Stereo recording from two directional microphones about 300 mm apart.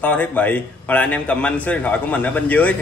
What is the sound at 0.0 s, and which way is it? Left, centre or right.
A man's voice, centre.